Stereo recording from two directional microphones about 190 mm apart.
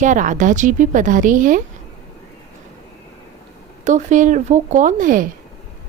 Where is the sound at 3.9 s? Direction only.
40° right (ahead or behind).